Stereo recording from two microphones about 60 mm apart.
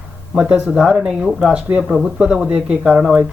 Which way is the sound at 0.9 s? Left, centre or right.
Centre.